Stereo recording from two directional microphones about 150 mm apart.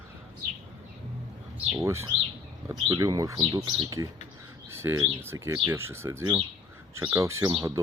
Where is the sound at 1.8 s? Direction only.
20° right (ahead or behind).